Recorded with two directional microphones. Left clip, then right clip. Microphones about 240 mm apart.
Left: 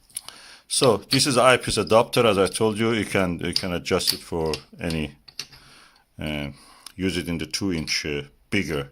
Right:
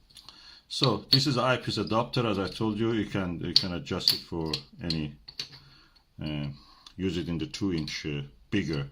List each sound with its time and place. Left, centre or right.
0.1 s speech: left
6.1 s speech: left